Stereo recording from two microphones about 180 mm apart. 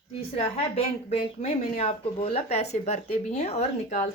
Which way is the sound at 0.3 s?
35° left (ahead or behind).